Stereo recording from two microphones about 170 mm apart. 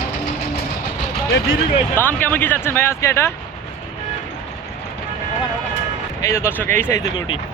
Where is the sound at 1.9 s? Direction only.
10° left (ahead or behind).